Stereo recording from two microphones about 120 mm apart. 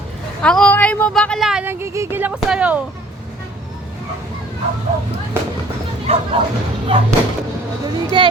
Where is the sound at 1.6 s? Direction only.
25° right (ahead or behind).